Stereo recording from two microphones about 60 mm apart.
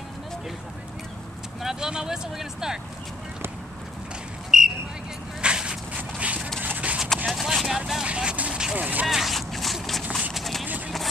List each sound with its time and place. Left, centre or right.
1.6 s speech: centre
4.5 s a sound: centre; by 7.0 s right
7.2 s vehicle: centre
8.1 s vehicle: centre
8.7 s speech: right
9.0 s a sound: centre
10.3 s clip-clop: centre